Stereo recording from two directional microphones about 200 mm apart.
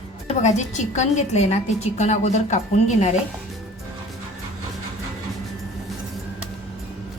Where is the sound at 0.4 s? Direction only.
35° left (ahead or behind).